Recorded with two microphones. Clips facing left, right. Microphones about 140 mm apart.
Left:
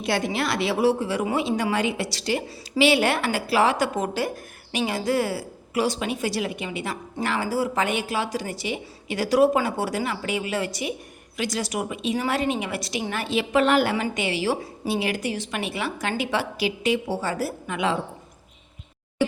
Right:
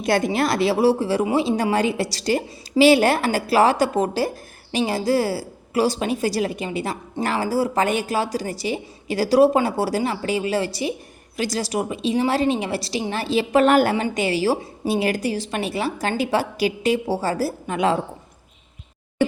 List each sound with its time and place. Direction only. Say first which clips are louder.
0.0 s speech: right 5 dB; 45° right (ahead or behind)
13.9 s speech: right 4 dB; 35° right (ahead or behind)